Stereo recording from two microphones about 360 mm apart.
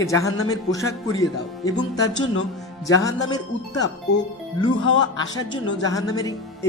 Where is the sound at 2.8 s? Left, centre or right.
Centre.